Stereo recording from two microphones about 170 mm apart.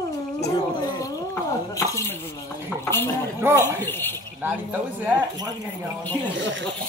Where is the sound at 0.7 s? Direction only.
20° left (ahead or behind).